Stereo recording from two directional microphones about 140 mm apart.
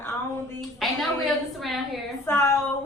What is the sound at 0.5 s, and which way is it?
A woman's voice, centre (ahead or behind).